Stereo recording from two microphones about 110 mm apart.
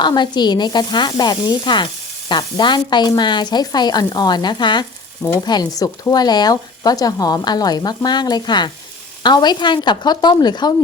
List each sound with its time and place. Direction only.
0.0 s speech: 45° left (ahead or behind)